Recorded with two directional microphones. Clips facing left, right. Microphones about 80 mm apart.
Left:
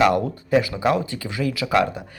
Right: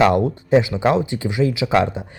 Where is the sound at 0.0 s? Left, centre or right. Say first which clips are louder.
Right 3 dB; right.